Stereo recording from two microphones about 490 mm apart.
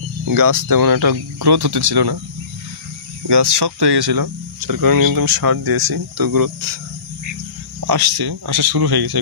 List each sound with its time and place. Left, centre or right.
0.2 s speech: right
3.3 s speech: right
7.8 s speech: right